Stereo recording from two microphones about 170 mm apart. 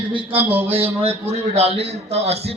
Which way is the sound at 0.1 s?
30° right (ahead or behind).